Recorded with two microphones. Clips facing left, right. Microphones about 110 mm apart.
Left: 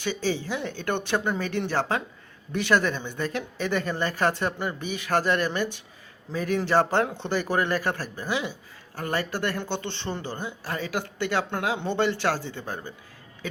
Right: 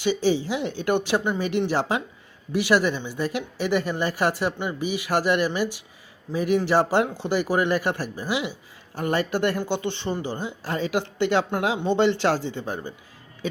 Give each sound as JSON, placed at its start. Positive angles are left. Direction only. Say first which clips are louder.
{"t": 0.0, "sound": "speech", "louder": "right 6 dB", "side_deg": -15}